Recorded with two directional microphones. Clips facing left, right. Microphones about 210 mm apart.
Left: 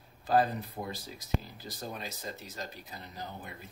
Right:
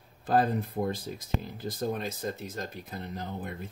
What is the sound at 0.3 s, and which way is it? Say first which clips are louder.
Speech: right 2 dB; 50° right (ahead or behind).